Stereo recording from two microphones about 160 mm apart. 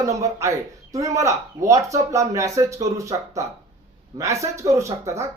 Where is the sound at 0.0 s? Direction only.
20° right (ahead or behind).